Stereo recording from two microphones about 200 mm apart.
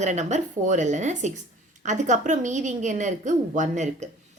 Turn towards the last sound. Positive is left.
turn(degrees=-35)  # may be behind; listen again after turning